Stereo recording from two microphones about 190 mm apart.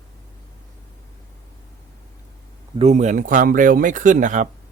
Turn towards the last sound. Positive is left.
turn(degrees=-40)  # may be behind; listen again after turning